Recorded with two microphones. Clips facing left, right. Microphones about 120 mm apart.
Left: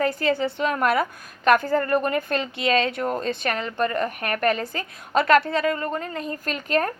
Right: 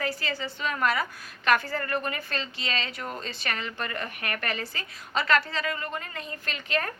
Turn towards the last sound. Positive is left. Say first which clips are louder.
# left 7 dB
turn(degrees=45)  # may be behind; listen again after turning